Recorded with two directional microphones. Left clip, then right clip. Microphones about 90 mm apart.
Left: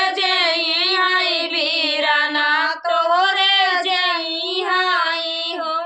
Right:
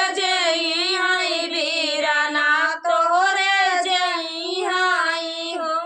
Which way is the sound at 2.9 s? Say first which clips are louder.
Left 1 dB; 25° left (ahead or behind).